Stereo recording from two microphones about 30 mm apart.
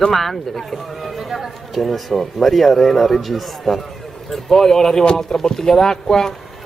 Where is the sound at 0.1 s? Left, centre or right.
Centre.